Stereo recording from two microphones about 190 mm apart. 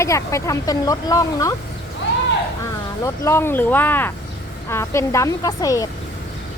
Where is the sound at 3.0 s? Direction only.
15° left (ahead or behind).